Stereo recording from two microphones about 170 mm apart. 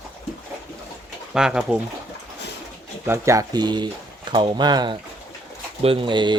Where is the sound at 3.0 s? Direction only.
15° right (ahead or behind).